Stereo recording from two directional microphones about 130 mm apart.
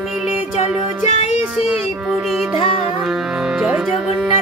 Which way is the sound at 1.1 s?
60° left (ahead or behind).